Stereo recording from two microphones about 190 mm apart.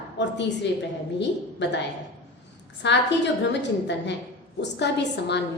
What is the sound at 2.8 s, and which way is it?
A woman's voice, 70° left (ahead or behind).